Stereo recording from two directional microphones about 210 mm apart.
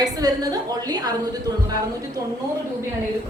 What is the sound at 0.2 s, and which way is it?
Speech, 20° right (ahead or behind).